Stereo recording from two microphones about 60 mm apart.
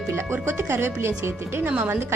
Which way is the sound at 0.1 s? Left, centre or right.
Right.